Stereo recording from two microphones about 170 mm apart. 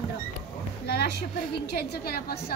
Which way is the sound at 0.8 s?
70° left (ahead or behind).